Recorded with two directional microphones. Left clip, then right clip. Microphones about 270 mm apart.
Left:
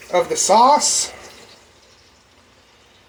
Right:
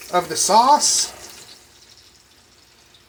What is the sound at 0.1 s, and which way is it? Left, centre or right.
Speech, right.